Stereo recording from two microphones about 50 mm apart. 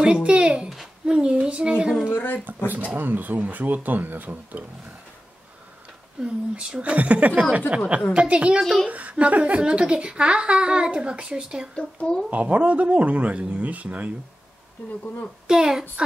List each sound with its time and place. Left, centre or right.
0.0 s a sound: right
0.7 s a sound: centre
1.1 s a woman's voice: right
2.1 s speech: left
2.4 s speech: right
6.2 s a woman's voice: right
11.7 s speech: centre
12.3 s a woman's voice: right
15.4 s speech: centre